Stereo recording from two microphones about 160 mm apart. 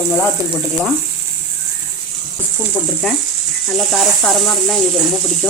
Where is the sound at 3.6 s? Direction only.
Centre (ahead or behind).